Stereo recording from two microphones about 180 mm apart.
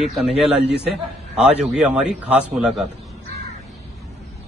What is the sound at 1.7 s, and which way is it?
A man's voice, 10° right (ahead or behind).